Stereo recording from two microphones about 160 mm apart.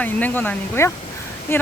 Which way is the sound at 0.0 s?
10° left (ahead or behind).